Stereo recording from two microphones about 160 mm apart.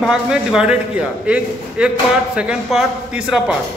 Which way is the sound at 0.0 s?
5° right (ahead or behind).